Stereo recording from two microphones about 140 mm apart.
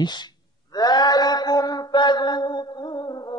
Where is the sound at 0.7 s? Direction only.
30° left (ahead or behind).